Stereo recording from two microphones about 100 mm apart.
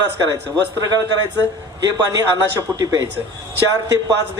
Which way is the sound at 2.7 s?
30° right (ahead or behind).